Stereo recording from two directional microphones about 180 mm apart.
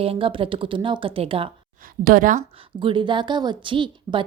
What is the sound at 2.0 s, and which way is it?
Speech, 50° right (ahead or behind).